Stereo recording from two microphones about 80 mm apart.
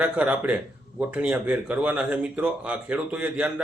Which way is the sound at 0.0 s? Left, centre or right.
Centre.